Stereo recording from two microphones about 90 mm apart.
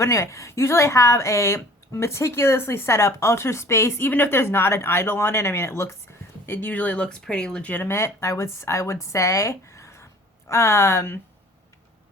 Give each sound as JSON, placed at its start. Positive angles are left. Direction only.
{"t": 0.0, "sound": "a woman's voice", "side_deg": 35}